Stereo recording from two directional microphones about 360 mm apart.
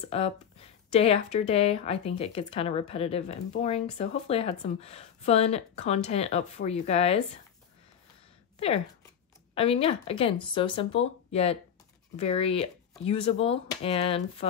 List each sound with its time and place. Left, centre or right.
0.1 s speech: centre
8.5 s speech: centre